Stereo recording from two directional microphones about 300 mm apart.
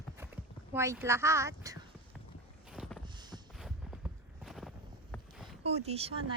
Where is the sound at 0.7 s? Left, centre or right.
Centre.